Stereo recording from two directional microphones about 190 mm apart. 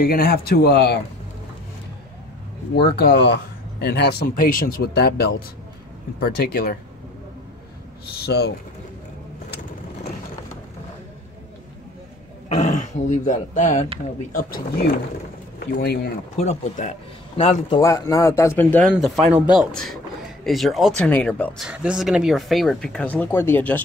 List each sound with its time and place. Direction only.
0.0 s speech: 50° left (ahead or behind)
2.7 s speech: 55° left (ahead or behind)
8.3 s speech: 60° left (ahead or behind)
12.5 s speech: 40° left (ahead or behind); by 16.0 s 60° left (ahead or behind)
16.3 s speech: 35° left (ahead or behind)
17.7 s a man's voice: 15° left (ahead or behind)